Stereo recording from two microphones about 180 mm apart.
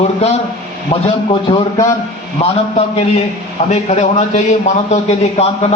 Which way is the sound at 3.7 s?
40° left (ahead or behind).